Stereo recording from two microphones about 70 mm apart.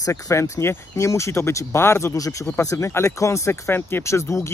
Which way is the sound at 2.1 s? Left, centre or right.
Left.